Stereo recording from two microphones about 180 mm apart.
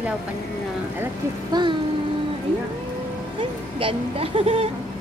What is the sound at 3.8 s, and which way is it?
Speech, 30° right (ahead or behind).